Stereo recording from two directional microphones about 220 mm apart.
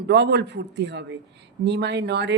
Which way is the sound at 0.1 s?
50° right (ahead or behind).